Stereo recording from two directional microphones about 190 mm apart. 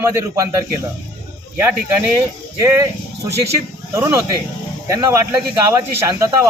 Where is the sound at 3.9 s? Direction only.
15° right (ahead or behind).